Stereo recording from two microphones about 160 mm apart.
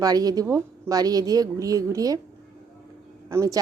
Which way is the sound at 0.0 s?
25° right (ahead or behind).